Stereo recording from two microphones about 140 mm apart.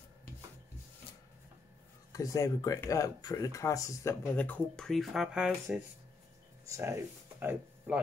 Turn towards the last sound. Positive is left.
turn(degrees=-10)  # may be behind; listen again after turning